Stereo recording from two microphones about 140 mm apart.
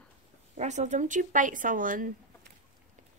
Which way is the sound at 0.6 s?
55° right (ahead or behind).